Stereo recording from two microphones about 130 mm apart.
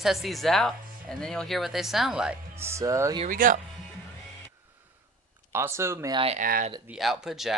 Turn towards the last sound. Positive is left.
turn(degrees=-5)  # may be behind; listen again after turning